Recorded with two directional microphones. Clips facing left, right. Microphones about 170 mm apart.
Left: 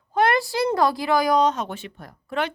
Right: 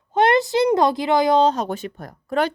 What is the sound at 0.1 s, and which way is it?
Speech, 20° right (ahead or behind).